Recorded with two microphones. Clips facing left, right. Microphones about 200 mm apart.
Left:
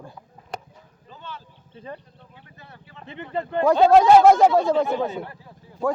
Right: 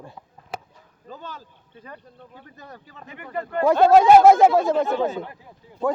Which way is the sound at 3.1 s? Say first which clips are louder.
Left 2 dB; 25° left (ahead or behind).